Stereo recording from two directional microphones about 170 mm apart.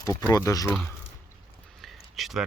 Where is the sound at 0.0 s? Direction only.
20° left (ahead or behind).